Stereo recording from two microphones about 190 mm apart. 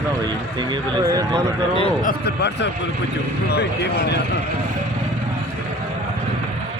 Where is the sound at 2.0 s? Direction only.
55° left (ahead or behind).